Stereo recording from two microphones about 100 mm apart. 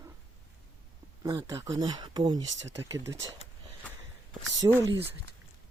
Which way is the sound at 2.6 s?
30° right (ahead or behind).